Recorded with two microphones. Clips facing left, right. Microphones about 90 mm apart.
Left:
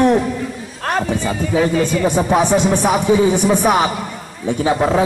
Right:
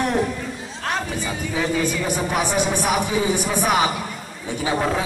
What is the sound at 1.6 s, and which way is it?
Speech, 45° left (ahead or behind).